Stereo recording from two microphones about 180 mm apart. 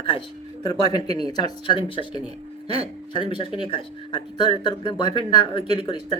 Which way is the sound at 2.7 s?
35° right (ahead or behind).